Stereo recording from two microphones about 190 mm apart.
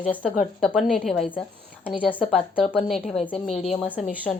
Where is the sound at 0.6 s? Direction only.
Centre (ahead or behind).